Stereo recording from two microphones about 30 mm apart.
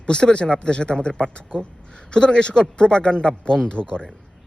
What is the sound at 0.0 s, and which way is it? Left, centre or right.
Speech, left.